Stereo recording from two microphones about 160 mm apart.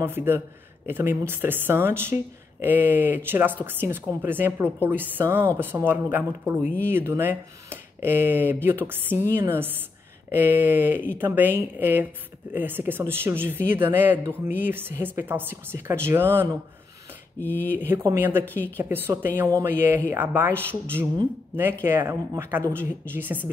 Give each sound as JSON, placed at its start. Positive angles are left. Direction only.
{"t": 0.0, "sound": "speech", "side_deg": -15}
{"t": 17.4, "sound": "speech", "side_deg": 10}
{"t": 17.7, "sound": "speech", "side_deg": -15}
{"t": 18.4, "sound": "speech", "side_deg": 10}
{"t": 18.8, "sound": "speech", "side_deg": -15}
{"t": 21.8, "sound": "speech", "side_deg": -15}